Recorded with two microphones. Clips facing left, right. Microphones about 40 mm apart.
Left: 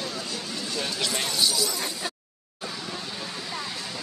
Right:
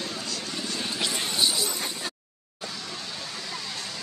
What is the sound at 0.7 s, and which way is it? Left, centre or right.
Speech, centre.